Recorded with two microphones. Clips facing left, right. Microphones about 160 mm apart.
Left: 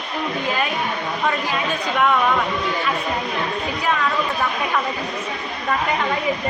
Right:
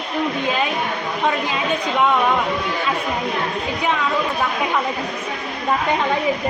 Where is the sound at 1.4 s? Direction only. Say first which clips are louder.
Right 2 dB; 15° right (ahead or behind).